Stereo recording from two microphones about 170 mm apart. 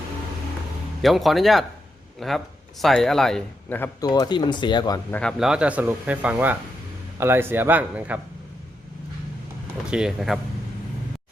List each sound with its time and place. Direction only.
1.0 s speech: centre (ahead or behind)
4.0 s speech: 25° left (ahead or behind)
5.4 s speech: 5° right (ahead or behind)
9.9 s speech: 5° right (ahead or behind)